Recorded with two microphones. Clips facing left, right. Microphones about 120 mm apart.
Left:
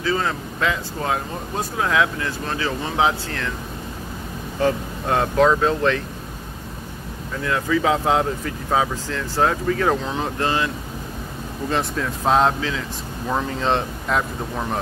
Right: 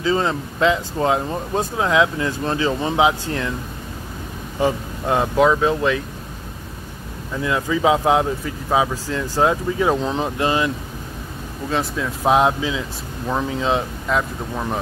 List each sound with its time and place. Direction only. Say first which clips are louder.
0.0 s speech: right 3 dB; 25° right (ahead or behind)
4.6 s speech: even; 15° right (ahead or behind)
7.4 s speech: right 2 dB; 15° right (ahead or behind)
11.7 s speech: right 1 dB; centre (ahead or behind)
12.3 s speech: right 2 dB; 15° right (ahead or behind)
13.3 s speech: right 1 dB; centre (ahead or behind)